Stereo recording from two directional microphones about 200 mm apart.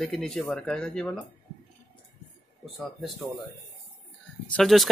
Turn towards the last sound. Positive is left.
turn(degrees=0)  # may be behind; listen again after turning